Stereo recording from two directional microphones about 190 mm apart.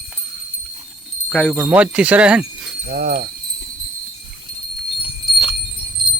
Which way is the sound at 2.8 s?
40° right (ahead or behind).